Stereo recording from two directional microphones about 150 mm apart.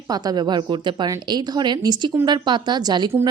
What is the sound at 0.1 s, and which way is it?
A woman's voice, 25° right (ahead or behind).